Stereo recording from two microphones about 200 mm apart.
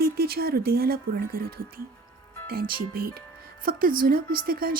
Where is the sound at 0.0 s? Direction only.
50° right (ahead or behind).